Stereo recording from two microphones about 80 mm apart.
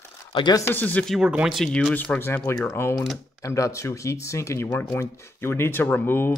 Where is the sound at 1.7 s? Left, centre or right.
Centre.